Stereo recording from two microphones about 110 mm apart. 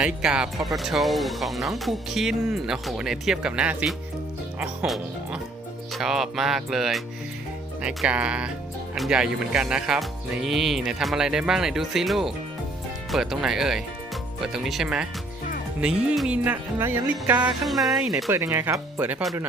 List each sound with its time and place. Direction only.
0.0 s speech: 5° right (ahead or behind)
5.9 s speech: 5° right (ahead or behind)
7.8 s music: 10° right (ahead or behind)
9.0 s speech: 5° right (ahead or behind)
15.8 s music: 5° right (ahead or behind)
17.7 s speech: centre (ahead or behind)
18.3 s speech: 25° right (ahead or behind)